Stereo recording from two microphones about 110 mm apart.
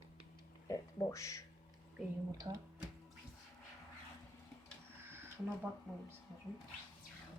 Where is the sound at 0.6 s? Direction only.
25° left (ahead or behind).